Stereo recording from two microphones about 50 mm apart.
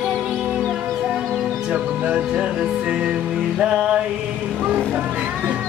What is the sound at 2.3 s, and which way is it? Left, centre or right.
Music, centre.